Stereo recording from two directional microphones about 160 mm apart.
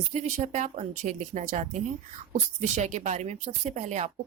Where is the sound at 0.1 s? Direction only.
45° right (ahead or behind).